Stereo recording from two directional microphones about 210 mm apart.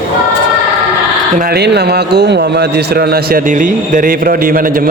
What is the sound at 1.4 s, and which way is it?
A man's voice, 50° right (ahead or behind).